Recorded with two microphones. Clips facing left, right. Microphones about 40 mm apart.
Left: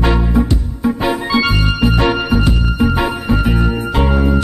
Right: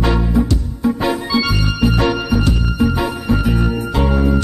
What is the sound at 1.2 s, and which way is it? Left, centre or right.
Music, left.